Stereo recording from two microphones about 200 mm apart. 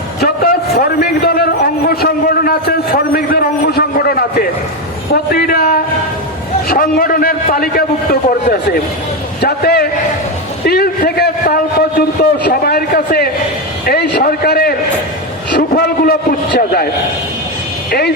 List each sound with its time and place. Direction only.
0.2 s a man's voice: 50° left (ahead or behind)
9.4 s a man's voice: 50° left (ahead or behind)